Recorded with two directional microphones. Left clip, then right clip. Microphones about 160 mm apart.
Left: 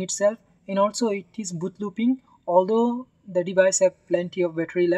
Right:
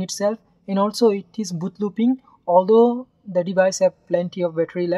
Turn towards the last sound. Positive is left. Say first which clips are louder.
# right 1 dB
turn(degrees=-20)  # may be behind; listen again after turning